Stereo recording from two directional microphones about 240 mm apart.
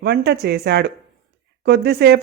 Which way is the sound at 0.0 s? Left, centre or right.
Right.